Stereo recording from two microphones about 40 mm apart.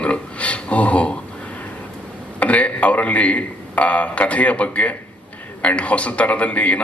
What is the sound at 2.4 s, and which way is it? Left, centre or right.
A man's voice, left.